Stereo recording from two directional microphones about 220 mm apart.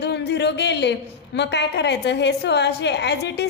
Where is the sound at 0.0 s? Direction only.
50° left (ahead or behind).